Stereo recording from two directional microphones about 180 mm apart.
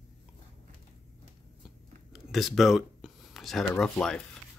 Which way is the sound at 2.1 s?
Centre (ahead or behind).